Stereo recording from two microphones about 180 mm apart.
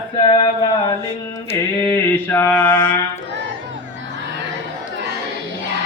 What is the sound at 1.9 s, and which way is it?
Mantra, 10° left (ahead or behind).